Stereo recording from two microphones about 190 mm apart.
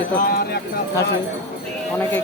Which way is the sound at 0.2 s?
50° left (ahead or behind).